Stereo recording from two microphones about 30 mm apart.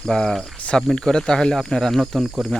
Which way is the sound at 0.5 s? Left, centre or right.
Left.